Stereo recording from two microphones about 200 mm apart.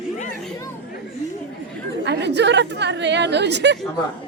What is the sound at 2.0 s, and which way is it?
Chatter, 60° right (ahead or behind).